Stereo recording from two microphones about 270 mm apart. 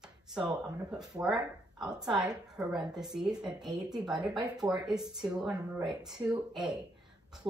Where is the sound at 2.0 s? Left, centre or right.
Centre.